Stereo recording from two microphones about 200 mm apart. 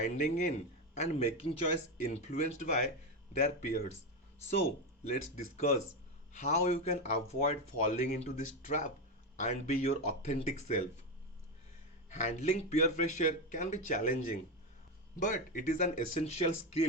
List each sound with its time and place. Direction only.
0.0 s speech: 35° left (ahead or behind)
5.0 s speech: 35° left (ahead or behind)
12.0 s speech: 35° left (ahead or behind)